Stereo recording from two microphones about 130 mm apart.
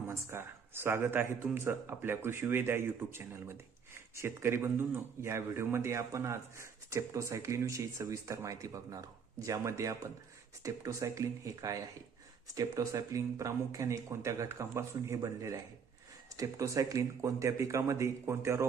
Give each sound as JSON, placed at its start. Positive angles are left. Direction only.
{"t": 0.1, "sound": "speech", "side_deg": -20}